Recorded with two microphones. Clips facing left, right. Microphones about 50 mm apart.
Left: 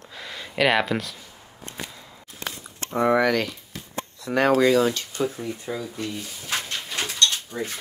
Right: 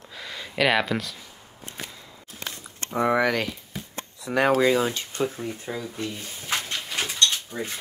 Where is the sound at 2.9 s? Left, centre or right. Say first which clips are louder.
Left 2 dB; centre.